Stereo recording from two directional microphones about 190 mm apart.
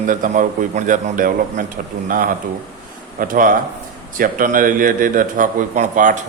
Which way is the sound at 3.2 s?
45° right (ahead or behind).